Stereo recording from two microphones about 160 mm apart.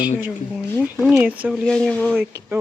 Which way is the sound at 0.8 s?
5° right (ahead or behind).